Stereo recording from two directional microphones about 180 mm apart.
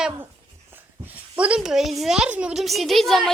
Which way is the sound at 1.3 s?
5° right (ahead or behind).